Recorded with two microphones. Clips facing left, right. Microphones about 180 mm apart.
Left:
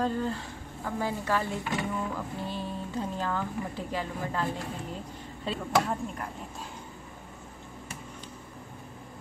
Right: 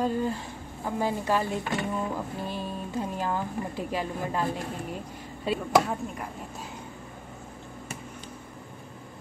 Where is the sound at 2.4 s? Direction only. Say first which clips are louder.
Right 1 dB; 15° right (ahead or behind).